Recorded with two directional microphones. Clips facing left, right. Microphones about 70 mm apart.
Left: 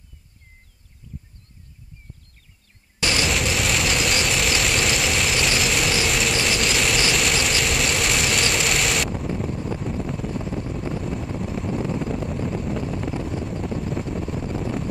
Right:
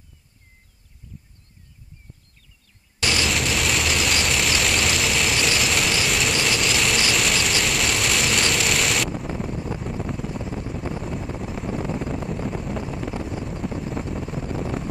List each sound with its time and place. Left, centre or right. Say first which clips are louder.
3.3 s vehicle: even; centre